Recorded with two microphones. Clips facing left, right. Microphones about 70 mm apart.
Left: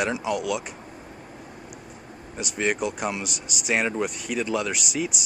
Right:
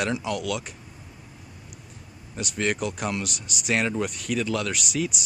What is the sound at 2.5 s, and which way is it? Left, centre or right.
Speech, centre.